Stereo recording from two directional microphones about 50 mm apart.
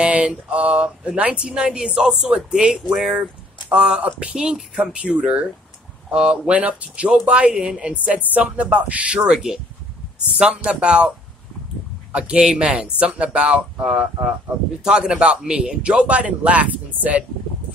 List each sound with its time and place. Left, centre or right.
0.0 s speech: right
9.2 s speech: centre
10.3 s speech: right
12.1 s speech: centre